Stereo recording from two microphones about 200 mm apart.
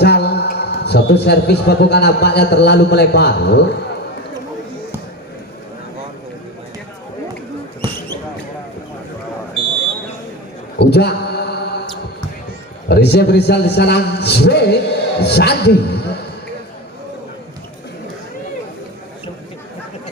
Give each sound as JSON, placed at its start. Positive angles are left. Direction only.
{"t": 0.0, "sound": "a man's voice", "side_deg": 55}
{"t": 10.8, "sound": "mantra", "side_deg": 55}
{"t": 12.9, "sound": "a man's voice", "side_deg": 55}